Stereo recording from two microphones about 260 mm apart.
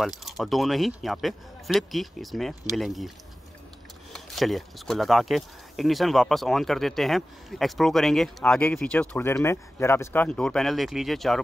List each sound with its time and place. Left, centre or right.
0.0 s speech: centre
4.1 s speech: centre